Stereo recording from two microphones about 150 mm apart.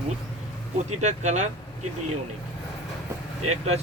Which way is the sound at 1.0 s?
50° right (ahead or behind).